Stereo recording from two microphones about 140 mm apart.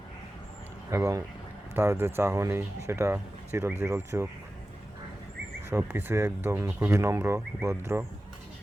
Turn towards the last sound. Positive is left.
turn(degrees=-20)  # may be behind; listen again after turning